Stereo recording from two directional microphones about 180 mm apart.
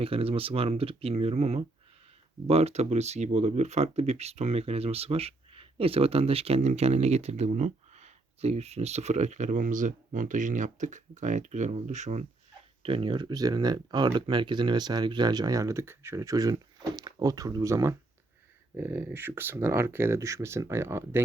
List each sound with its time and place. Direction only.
0.0 s speech: 30° right (ahead or behind)
12.8 s speech: 30° right (ahead or behind); by 21.2 s 15° right (ahead or behind)